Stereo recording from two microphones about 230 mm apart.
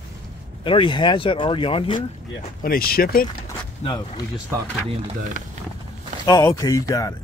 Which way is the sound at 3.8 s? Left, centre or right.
Left.